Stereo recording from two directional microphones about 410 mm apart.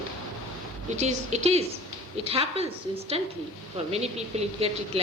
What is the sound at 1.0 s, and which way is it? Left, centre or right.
Speech, centre.